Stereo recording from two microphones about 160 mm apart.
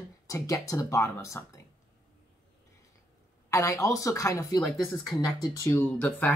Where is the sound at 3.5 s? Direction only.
20° left (ahead or behind).